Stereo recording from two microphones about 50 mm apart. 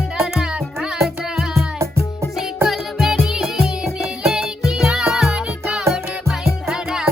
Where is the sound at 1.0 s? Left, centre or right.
Right.